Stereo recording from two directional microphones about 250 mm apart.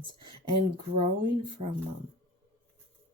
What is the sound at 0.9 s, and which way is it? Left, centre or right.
Speech, centre.